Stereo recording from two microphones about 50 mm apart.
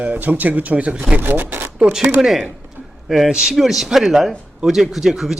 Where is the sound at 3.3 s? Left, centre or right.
Centre.